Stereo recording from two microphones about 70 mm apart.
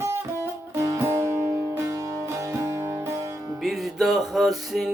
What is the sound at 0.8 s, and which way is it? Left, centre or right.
Music, right.